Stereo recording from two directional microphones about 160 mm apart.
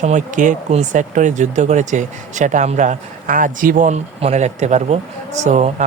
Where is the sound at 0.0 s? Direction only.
50° right (ahead or behind).